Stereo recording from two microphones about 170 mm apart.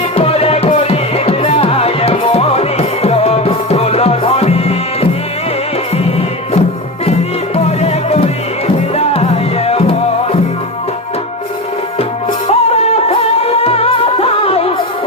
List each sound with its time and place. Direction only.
0.2 s music: 35° left (ahead or behind)
7.5 s music: 40° left (ahead or behind)
12.5 s music: 40° left (ahead or behind)